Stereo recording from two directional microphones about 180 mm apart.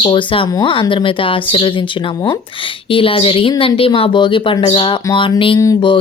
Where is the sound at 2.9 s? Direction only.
30° left (ahead or behind).